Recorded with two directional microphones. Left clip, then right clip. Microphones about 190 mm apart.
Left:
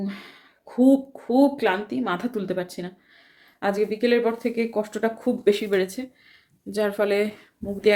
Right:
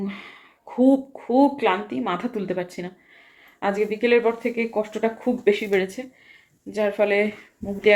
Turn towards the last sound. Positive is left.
turn(degrees=15)  # may be behind; listen again after turning